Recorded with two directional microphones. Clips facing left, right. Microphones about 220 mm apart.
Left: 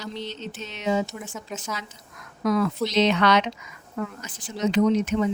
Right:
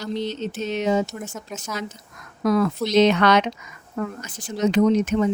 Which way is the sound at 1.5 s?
Centre (ahead or behind).